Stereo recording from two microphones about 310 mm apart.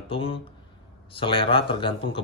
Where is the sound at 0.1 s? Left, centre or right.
Centre.